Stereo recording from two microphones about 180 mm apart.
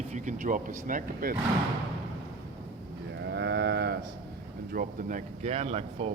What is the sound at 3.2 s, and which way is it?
Livestock, 75° right (ahead or behind).